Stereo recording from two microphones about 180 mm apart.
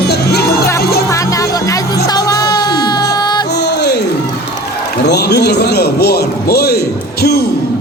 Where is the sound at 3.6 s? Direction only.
65° left (ahead or behind).